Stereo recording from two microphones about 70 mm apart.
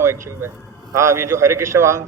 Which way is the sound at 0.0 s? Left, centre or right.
Right.